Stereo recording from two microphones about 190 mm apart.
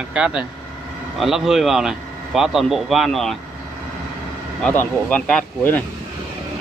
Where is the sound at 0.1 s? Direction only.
5° right (ahead or behind).